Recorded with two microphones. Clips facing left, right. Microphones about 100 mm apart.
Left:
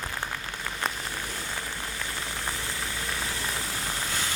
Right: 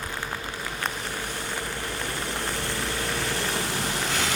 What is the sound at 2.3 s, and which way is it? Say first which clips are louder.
Vehicle: right 4 dB; 65° right (ahead or behind).